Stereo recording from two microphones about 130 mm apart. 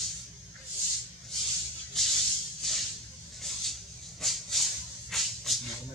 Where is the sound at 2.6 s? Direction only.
5° left (ahead or behind).